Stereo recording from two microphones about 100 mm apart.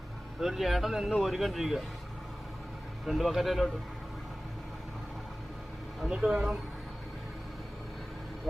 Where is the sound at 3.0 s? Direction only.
Centre (ahead or behind).